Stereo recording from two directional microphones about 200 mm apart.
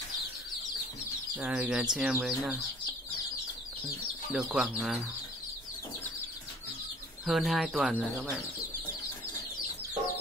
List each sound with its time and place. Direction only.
1.3 s speech: 5° right (ahead or behind)
4.3 s speech: centre (ahead or behind)
7.2 s speech: centre (ahead or behind)